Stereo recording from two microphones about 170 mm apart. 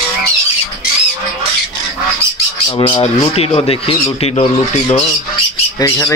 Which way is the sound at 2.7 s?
30° left (ahead or behind).